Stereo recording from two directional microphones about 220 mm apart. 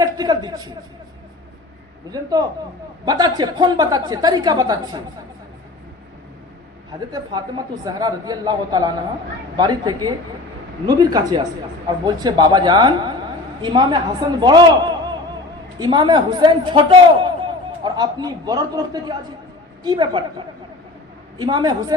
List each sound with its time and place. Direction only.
0.0 s a man's voice: 15° right (ahead or behind)
3.1 s speech: 20° right (ahead or behind)
7.1 s a man's voice: 20° right (ahead or behind)
21.3 s a man's voice: 20° right (ahead or behind)